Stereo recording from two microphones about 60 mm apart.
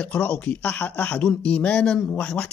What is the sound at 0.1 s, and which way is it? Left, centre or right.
Speech, left.